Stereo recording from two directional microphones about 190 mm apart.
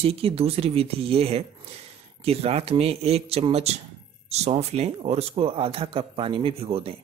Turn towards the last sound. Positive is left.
turn(degrees=-30)  # may be behind; listen again after turning